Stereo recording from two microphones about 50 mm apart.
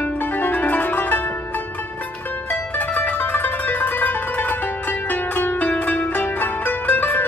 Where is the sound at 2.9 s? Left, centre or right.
Left.